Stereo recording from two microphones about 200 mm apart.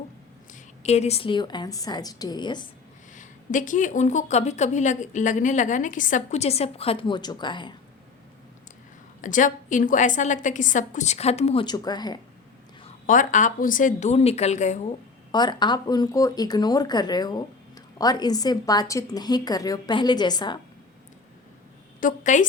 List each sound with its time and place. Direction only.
0.5 s a woman's voice: 35° left (ahead or behind)
3.2 s a woman's voice: 40° left (ahead or behind); by 7.8 s 25° left (ahead or behind)
9.2 s a woman's voice: 40° left (ahead or behind); by 12.2 s 20° left (ahead or behind)
13.1 s a woman's voice: 40° left (ahead or behind)
15.3 s a woman's voice: 20° left (ahead or behind)
22.0 s a woman's voice: 40° left (ahead or behind)